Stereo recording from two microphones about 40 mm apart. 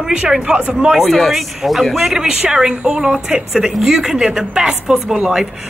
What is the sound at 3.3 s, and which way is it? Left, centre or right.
A woman's voice, centre.